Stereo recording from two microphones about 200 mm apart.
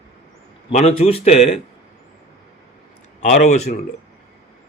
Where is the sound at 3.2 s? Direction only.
35° left (ahead or behind).